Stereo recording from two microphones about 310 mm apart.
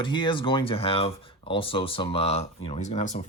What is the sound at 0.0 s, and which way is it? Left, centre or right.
Speech, centre.